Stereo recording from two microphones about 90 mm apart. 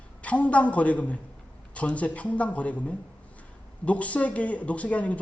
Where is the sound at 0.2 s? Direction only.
15° left (ahead or behind).